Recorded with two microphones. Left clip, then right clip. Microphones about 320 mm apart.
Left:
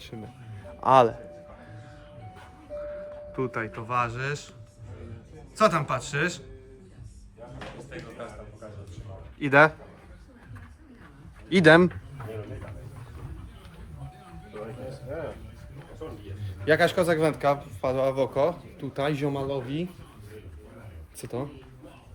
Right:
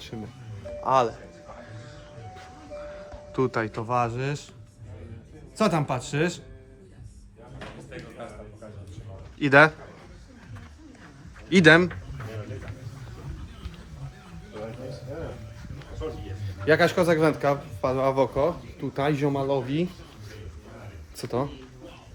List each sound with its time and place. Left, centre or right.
0.1 s speech: centre
0.8 s speech: left
3.3 s speech: centre
5.5 s speech: centre
7.6 s a sound: centre
9.4 s speech: centre
11.4 s speech: centre
16.6 s speech: centre
21.2 s speech: centre